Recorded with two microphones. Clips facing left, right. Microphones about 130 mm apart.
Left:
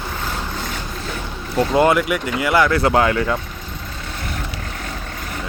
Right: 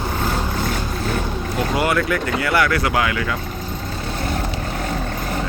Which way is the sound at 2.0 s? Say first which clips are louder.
Even; 15° left (ahead or behind).